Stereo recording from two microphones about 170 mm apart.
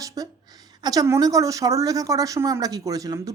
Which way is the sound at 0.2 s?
20° right (ahead or behind).